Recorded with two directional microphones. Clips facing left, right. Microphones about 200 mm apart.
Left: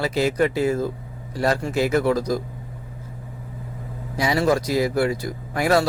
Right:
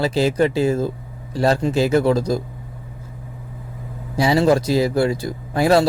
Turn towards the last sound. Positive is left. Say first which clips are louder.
# right 4 dB
turn(degrees=-30)  # may be behind; listen again after turning